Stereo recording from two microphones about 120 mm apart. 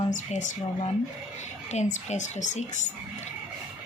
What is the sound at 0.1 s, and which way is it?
Speech, 90° left.